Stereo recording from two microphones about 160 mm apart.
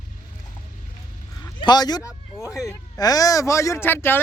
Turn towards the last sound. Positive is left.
turn(degrees=15)  # may be behind; listen again after turning